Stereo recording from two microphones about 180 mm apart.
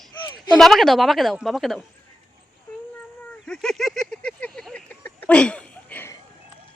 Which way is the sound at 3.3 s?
5° left (ahead or behind).